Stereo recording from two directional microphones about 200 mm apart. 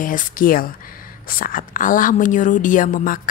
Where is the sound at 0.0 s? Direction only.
45° left (ahead or behind).